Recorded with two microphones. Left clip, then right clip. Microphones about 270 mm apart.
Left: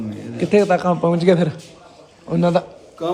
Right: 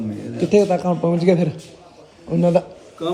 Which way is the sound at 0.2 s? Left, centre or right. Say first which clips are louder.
Even; centre.